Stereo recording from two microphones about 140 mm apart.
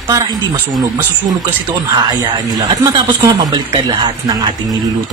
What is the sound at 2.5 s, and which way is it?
Speech, 30° right (ahead or behind).